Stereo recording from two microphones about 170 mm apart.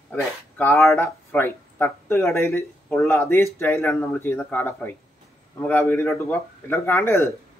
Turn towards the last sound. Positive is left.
turn(degrees=15)  # may be behind; listen again after turning